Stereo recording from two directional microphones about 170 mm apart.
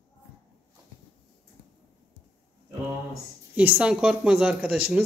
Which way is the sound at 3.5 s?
5° right (ahead or behind).